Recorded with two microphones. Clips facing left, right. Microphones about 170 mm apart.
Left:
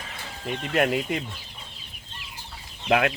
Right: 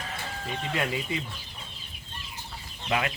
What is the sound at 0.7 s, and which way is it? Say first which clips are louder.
Speech: left 7 dB; 60° left (ahead or behind).